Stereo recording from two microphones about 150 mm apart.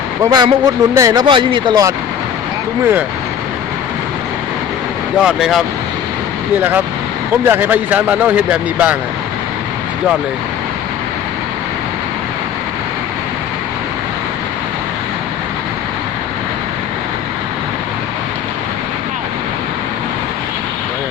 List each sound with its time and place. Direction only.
0.2 s speech: 25° right (ahead or behind)
5.2 s speech: centre (ahead or behind)
7.4 s speech: 15° right (ahead or behind)